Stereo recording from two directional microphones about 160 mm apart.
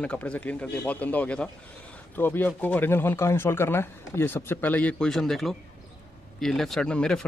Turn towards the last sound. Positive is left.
turn(degrees=5)  # may be behind; listen again after turning